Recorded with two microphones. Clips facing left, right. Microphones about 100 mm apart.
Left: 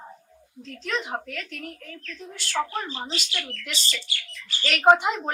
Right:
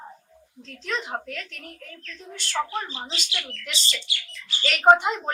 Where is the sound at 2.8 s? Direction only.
35° left (ahead or behind).